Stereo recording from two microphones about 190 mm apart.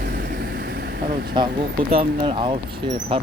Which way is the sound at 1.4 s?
25° right (ahead or behind).